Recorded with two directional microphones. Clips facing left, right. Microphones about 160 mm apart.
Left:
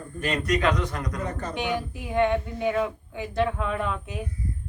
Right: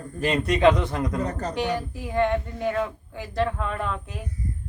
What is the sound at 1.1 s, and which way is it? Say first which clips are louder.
Speech: right 4 dB; 35° right (ahead or behind).